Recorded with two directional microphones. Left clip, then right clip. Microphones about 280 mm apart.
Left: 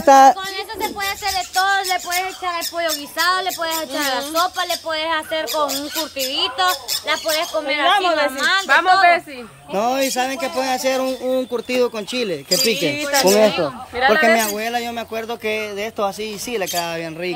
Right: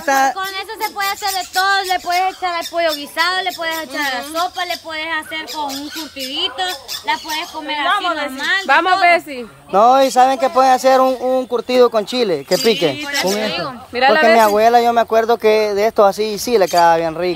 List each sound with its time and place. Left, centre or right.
0.0 s speech: left
0.4 s speech: centre
1.6 s speech: right
2.1 s speech: centre
8.6 s speech: right
9.7 s speech: centre
13.2 s speech: centre
13.9 s speech: right
14.3 s speech: centre